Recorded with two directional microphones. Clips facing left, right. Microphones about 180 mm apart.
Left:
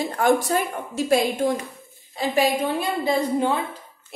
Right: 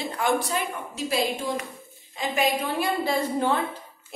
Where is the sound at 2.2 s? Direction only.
30° left (ahead or behind).